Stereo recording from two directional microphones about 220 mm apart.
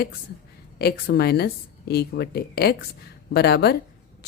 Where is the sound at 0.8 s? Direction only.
45° left (ahead or behind).